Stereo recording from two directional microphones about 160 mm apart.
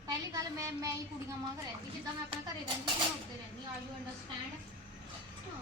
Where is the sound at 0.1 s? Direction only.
20° right (ahead or behind).